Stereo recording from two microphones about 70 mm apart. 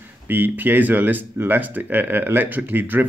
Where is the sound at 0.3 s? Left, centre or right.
Right.